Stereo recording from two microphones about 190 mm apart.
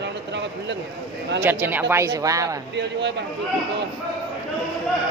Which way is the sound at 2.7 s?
65° right (ahead or behind).